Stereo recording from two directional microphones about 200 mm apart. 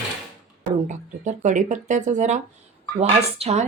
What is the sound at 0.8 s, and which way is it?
Speech, 40° right (ahead or behind).